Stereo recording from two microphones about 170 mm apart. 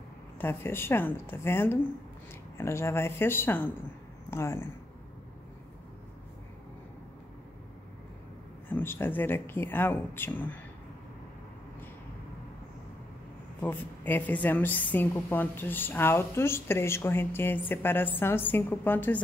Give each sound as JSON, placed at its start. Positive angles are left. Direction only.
{"t": 0.4, "sound": "a woman's voice", "side_deg": 15}
{"t": 8.6, "sound": "a woman's voice", "side_deg": 10}
{"t": 13.6, "sound": "a woman's voice", "side_deg": 10}